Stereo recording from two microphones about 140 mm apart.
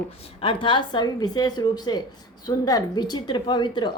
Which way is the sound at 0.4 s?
35° left (ahead or behind).